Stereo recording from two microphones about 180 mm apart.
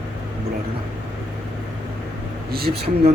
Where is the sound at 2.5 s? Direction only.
60° right (ahead or behind).